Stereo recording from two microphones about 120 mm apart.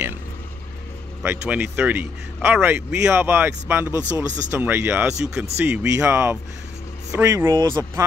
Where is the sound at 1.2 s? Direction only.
20° right (ahead or behind).